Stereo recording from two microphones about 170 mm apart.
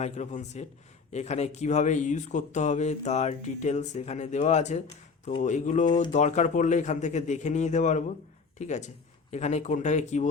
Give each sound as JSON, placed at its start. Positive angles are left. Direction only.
{"t": 0.0, "sound": "speech", "side_deg": 45}